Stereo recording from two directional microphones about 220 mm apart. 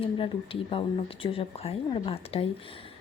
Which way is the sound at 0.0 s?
25° left (ahead or behind).